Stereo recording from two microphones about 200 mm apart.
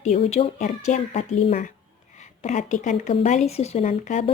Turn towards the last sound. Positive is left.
turn(degrees=35)  # may be behind; listen again after turning